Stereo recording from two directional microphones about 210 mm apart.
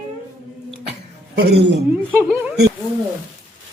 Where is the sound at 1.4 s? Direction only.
50° right (ahead or behind).